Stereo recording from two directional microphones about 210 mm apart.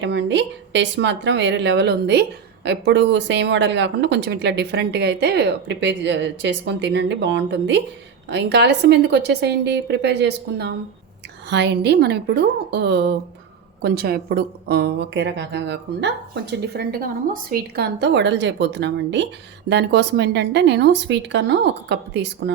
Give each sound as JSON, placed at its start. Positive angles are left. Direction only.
{"t": 0.0, "sound": "speech", "side_deg": -55}